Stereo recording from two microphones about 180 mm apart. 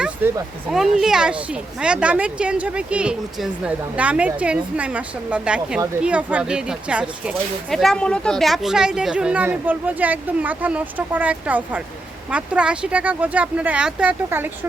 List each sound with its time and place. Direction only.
0.2 s speech: 10° right (ahead or behind)